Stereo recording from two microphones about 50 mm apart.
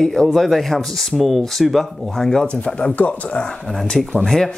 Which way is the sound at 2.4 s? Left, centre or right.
Left.